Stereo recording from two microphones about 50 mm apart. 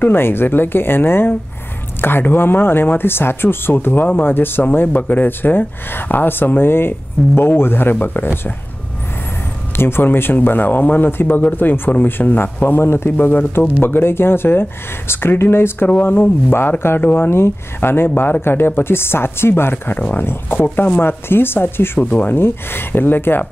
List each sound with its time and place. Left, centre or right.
0.0 s speech: left
9.8 s speech: left
12.8 s speech: left
13.3 s speech: left
17.0 s speech: left
17.3 s speech: left